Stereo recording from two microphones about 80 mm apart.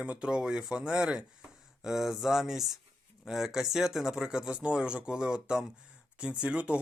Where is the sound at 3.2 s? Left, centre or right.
Centre.